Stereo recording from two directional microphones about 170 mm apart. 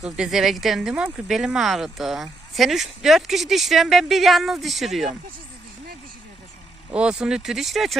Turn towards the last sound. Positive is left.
turn(degrees=0)  # may be behind; listen again after turning